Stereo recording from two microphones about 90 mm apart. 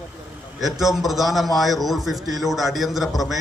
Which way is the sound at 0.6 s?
Centre (ahead or behind).